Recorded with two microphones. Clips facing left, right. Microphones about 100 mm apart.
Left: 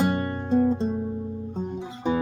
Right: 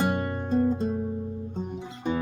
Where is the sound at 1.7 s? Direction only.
15° left (ahead or behind).